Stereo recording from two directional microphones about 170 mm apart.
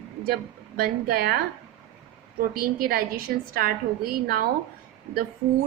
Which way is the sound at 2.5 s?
60° right (ahead or behind).